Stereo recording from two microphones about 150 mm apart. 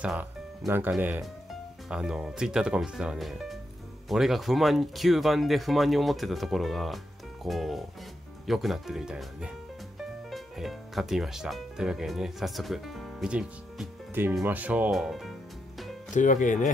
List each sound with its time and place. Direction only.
0.0 s speech: 5° right (ahead or behind)
16.2 s speech: 60° left (ahead or behind)